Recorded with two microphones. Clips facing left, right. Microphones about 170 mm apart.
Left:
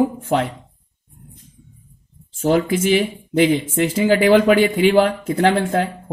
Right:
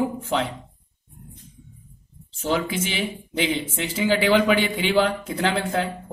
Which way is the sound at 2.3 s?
50° left (ahead or behind).